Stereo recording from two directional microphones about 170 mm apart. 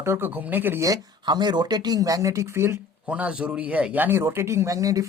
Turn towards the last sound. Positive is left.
turn(degrees=-20)  # may be behind; listen again after turning